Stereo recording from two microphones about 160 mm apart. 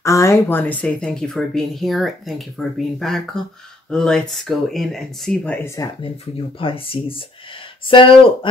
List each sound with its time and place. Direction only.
0.0 s speech: 20° left (ahead or behind)
6.6 s speech: 35° left (ahead or behind)